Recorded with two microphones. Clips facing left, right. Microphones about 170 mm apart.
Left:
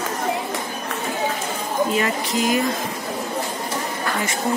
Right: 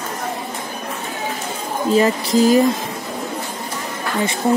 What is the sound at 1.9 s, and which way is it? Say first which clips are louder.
Speech: right 6 dB; 35° right (ahead or behind).